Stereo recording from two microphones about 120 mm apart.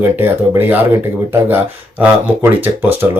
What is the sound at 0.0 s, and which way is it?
Speech, 20° right (ahead or behind).